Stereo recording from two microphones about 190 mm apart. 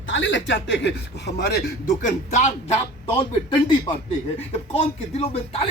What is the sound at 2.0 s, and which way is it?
Speech, 40° left (ahead or behind).